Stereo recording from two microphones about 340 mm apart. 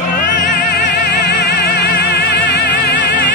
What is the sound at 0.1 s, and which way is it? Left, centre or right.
Music, left.